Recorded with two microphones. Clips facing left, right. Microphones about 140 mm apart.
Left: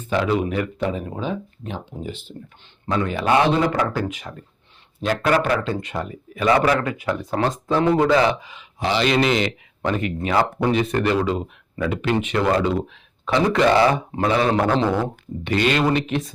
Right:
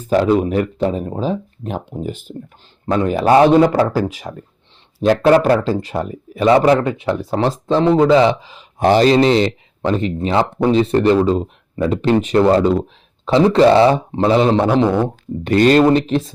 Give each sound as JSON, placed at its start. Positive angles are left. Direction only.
{"t": 0.0, "sound": "speech", "side_deg": -40}
{"t": 8.8, "sound": "speech", "side_deg": -50}
{"t": 9.0, "sound": "speech", "side_deg": -30}
{"t": 14.7, "sound": "a sound", "side_deg": -15}
{"t": 15.4, "sound": "speech", "side_deg": -40}